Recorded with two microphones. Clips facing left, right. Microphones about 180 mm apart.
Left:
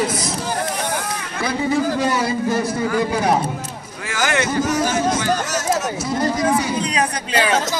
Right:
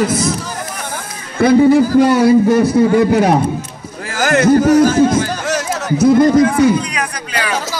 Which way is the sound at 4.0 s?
40° right (ahead or behind).